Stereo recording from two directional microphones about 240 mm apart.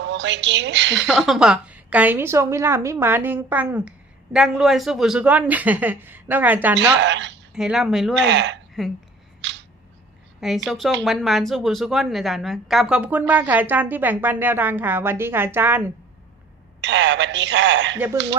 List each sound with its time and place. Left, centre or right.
0.0 s speech: right
0.9 s a woman's voice: centre
7.0 s speech: right
7.5 s speech: centre
8.2 s speech: right
8.8 s speech: centre
9.4 s a sound: right
10.4 s a woman's voice: centre
16.8 s speech: right